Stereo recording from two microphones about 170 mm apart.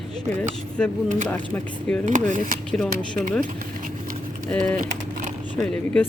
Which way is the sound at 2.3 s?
50° right (ahead or behind).